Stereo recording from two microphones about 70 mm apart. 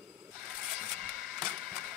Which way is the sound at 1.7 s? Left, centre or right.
Right.